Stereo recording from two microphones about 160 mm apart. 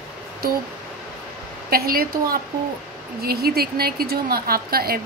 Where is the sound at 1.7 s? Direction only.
65° right (ahead or behind).